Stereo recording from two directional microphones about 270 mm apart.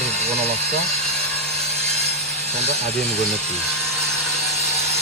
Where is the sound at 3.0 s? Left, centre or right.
Centre.